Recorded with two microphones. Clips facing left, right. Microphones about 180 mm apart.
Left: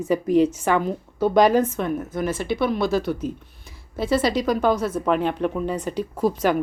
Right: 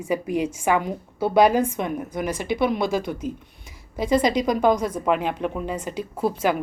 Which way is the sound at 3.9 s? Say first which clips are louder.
Right 1 dB; 15° right (ahead or behind).